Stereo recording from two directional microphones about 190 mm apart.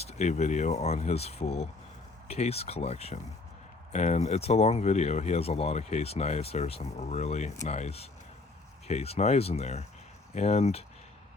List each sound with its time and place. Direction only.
0.0 s speech: 35° left (ahead or behind)